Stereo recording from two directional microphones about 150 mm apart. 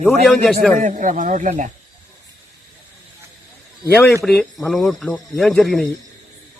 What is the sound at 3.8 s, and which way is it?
Speech, 15° left (ahead or behind).